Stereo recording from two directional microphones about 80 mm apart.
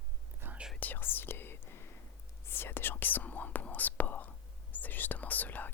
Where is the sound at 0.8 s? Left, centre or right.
Left.